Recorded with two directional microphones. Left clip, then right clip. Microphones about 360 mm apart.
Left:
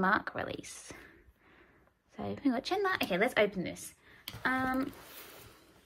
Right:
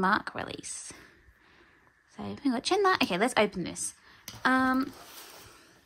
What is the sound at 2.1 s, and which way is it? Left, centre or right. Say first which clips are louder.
A woman's voice: right 1 dB; centre.